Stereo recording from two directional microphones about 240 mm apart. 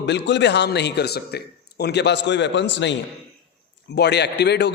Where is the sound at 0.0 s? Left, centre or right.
Left.